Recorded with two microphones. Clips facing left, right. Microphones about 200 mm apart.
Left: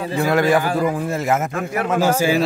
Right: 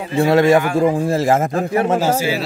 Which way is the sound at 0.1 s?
25° right (ahead or behind).